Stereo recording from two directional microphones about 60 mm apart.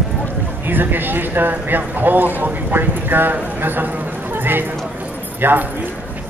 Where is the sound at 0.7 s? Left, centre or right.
Right.